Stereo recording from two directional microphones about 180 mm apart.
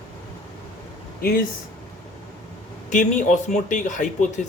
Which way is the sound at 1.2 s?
55° left (ahead or behind).